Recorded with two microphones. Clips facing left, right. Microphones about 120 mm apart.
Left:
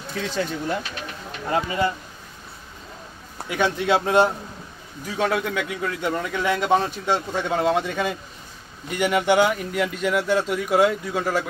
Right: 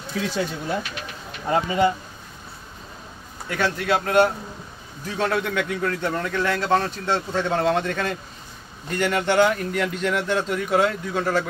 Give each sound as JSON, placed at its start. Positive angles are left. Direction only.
{"t": 0.1, "sound": "speech", "side_deg": -10}
{"t": 1.5, "sound": "speech", "side_deg": -25}
{"t": 3.4, "sound": "speech", "side_deg": 15}
{"t": 5.0, "sound": "a man's voice", "side_deg": 10}